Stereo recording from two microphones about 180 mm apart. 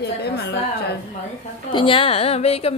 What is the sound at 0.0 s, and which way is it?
Speech, 65° left (ahead or behind).